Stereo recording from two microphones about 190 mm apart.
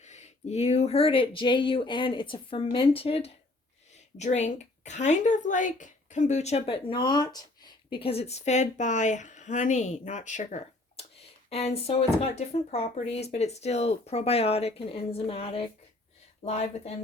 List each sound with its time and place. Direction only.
0.0 s speech: 35° left (ahead or behind)